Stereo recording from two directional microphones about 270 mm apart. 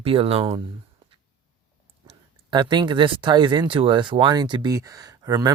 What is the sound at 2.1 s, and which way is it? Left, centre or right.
Speech, centre.